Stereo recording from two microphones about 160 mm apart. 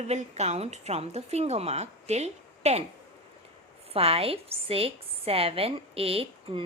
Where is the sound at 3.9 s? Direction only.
40° right (ahead or behind).